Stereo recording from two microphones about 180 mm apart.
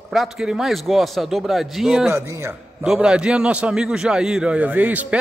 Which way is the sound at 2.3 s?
15° right (ahead or behind).